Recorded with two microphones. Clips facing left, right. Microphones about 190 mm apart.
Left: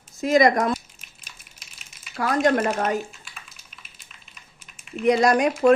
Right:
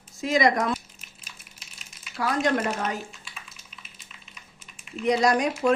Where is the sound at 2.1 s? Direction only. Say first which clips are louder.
Left 4 dB; 50° left (ahead or behind).